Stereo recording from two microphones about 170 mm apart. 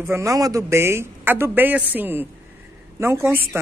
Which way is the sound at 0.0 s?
15° right (ahead or behind).